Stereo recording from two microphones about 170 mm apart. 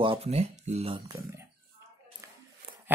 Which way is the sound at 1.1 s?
20° right (ahead or behind).